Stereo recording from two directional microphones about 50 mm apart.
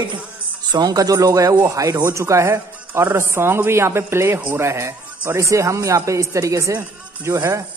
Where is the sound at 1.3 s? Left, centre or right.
Right.